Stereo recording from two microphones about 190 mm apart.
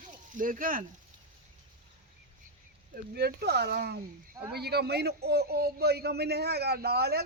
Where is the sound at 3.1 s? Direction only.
55° right (ahead or behind).